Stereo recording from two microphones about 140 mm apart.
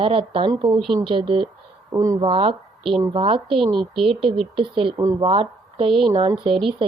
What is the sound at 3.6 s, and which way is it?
Speech, centre (ahead or behind).